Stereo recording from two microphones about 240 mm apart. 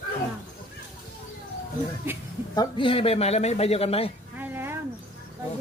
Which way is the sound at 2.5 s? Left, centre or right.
Centre.